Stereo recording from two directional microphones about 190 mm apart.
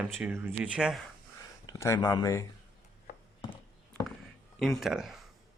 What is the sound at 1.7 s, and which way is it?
Speech, 15° left (ahead or behind).